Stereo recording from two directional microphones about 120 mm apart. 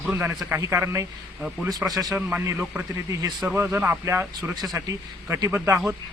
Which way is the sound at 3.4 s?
20° right (ahead or behind).